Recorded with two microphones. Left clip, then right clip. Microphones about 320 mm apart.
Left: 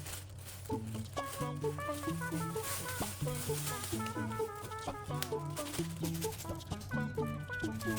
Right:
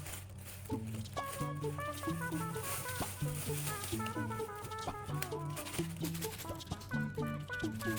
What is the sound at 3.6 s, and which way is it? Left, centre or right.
Music, centre.